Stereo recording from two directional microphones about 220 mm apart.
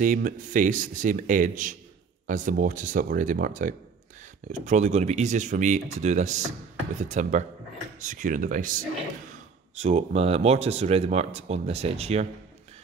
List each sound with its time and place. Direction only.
0.0 s speech: 35° right (ahead or behind)
9.8 s speech: 30° right (ahead or behind)